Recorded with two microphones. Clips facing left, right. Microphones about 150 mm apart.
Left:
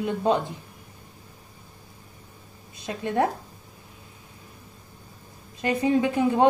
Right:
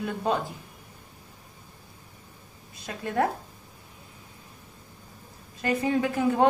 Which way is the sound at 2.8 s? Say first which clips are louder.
Left 2 dB; 20° left (ahead or behind).